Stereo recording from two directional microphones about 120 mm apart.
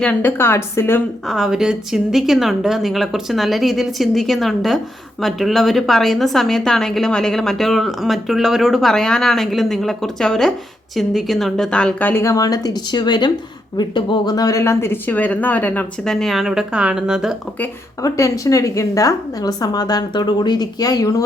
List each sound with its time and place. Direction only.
0.0 s a woman's voice: 10° left (ahead or behind)
1.3 s a woman's voice: 5° right (ahead or behind); by 16.1 s 15° left (ahead or behind)
16.2 s a woman's voice: centre (ahead or behind)
18.0 s a woman's voice: 25° left (ahead or behind)